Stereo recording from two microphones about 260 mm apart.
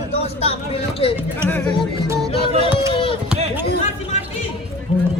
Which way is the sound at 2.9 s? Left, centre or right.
Centre.